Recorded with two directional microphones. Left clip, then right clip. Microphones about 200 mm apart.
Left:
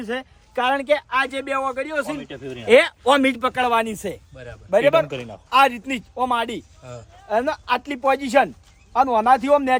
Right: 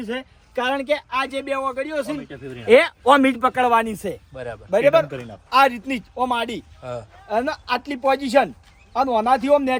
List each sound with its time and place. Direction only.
0.0 s a man's voice: 5° left (ahead or behind)
2.3 s speech: 45° left (ahead or behind)
2.6 s a man's voice: centre (ahead or behind)